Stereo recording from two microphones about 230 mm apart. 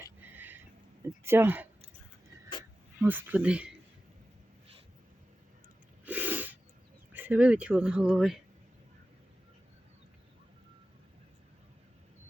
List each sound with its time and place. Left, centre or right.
0.0 s a sound: centre
3.0 s speech: centre
6.1 s snort: centre
7.1 s speech: centre